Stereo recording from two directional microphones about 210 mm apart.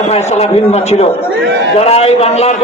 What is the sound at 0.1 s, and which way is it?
A man's voice, 30° left (ahead or behind).